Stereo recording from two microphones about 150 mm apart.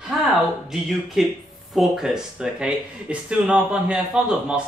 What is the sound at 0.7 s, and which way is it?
Speech, centre (ahead or behind).